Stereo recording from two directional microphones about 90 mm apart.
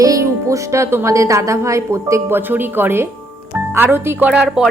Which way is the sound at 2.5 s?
20° right (ahead or behind).